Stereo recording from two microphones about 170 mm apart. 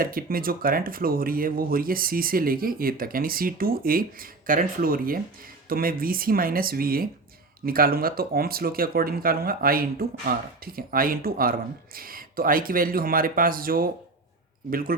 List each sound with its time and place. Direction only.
0.0 s speech: 60° right (ahead or behind)